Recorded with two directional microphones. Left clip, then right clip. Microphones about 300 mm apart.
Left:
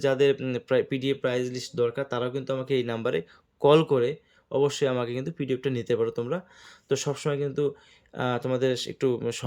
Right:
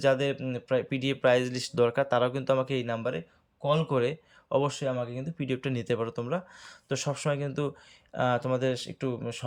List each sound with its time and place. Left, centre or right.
0.0 s speech: centre
3.9 s speech: centre